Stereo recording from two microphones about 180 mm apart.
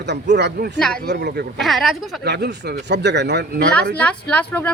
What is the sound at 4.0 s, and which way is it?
Speech, 5° left (ahead or behind).